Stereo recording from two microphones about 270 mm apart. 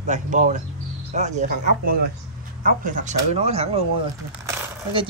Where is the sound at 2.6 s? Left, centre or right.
Right.